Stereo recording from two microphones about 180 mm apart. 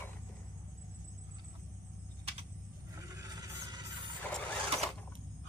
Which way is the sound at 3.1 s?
20° right (ahead or behind).